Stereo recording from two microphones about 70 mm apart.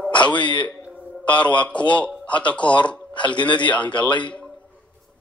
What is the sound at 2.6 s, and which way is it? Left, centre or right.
Speech, left.